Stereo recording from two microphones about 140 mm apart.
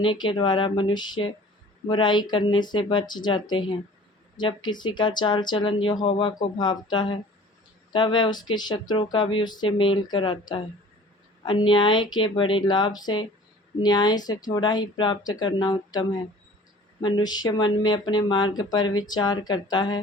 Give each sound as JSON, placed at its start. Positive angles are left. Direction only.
{"t": 0.0, "sound": "speech", "side_deg": 35}